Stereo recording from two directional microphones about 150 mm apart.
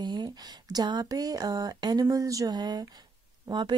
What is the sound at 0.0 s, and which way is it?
A woman's voice, 30° right (ahead or behind).